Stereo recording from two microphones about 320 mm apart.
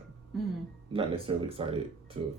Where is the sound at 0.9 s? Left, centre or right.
Centre.